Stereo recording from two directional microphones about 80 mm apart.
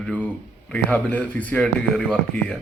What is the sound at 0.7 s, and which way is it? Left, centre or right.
Speech, left.